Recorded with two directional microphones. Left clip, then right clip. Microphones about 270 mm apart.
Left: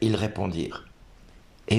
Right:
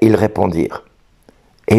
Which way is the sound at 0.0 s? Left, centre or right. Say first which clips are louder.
Right 14 dB; right.